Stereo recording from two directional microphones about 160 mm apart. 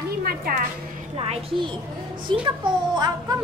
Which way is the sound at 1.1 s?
35° right (ahead or behind).